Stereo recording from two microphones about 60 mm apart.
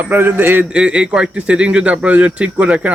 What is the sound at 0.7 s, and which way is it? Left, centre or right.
Speech, centre.